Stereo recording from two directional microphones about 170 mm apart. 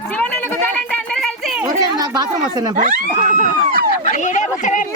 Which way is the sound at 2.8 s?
50° right (ahead or behind).